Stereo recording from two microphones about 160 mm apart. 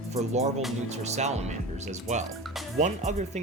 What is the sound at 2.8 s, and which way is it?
Speech, 45° right (ahead or behind).